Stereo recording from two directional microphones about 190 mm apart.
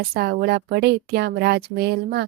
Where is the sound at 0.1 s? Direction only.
55° right (ahead or behind).